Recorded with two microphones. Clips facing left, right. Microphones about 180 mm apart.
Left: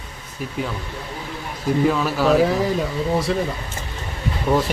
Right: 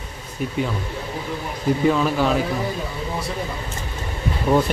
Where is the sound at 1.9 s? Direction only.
Centre (ahead or behind).